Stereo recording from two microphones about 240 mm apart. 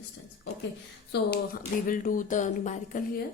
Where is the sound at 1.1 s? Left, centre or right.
Left.